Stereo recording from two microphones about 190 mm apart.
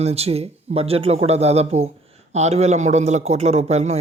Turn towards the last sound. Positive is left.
turn(degrees=-35)  # may be behind; listen again after turning